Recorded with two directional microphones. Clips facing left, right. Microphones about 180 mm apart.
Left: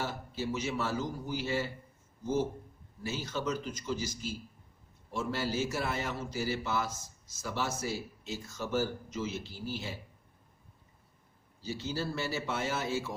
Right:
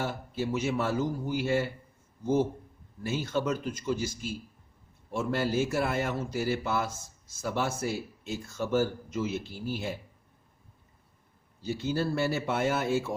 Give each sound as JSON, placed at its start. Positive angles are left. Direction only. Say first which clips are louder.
{"t": 0.0, "sound": "a man's voice", "louder": "right 4 dB", "side_deg": -55}
{"t": 11.6, "sound": "a man's voice", "louder": "right 6 dB", "side_deg": -55}